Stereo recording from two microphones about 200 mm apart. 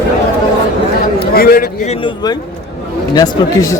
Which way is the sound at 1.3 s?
50° left (ahead or behind).